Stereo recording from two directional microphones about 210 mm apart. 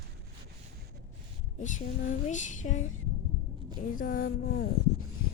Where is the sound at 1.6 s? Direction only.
35° left (ahead or behind).